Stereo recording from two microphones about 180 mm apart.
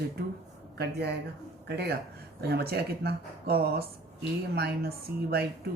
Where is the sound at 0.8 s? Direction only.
65° right (ahead or behind).